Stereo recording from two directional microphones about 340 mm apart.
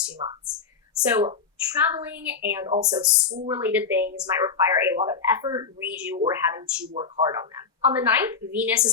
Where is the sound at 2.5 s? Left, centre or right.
Centre.